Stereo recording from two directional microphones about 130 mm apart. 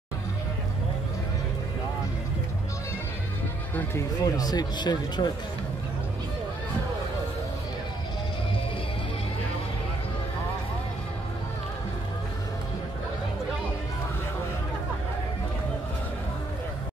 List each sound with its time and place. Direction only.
4.2 s speech: 30° left (ahead or behind)